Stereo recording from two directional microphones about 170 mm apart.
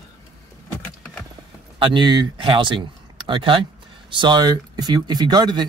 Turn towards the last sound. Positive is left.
turn(degrees=-25)  # may be behind; listen again after turning